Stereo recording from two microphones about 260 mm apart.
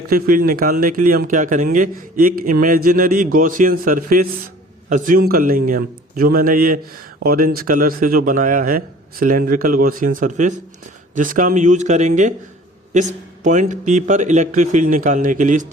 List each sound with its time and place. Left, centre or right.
0.1 s a man's voice: right